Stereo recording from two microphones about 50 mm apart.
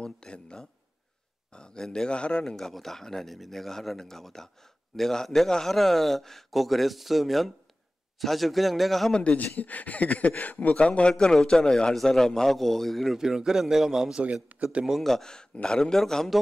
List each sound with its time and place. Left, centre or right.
0.0 s a man's voice: centre
2.5 s a man's voice: centre
9.1 s a man's voice: centre
9.4 s speech: left
10.7 s a man's voice: left; by 13.2 s centre
13.2 s speech: centre
14.2 s speech: right
14.9 s a man's voice: centre